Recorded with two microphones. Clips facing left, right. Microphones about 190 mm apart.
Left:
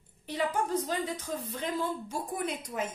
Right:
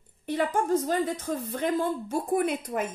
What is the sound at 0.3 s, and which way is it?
A woman's voice, 50° right (ahead or behind).